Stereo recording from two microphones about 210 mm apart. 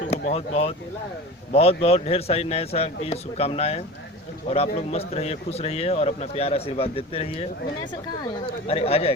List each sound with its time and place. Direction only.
0.1 s speech: 30° left (ahead or behind)
8.6 s speech: 30° left (ahead or behind)